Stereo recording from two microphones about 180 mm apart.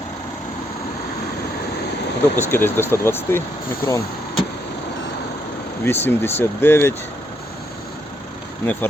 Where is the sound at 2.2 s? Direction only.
10° left (ahead or behind).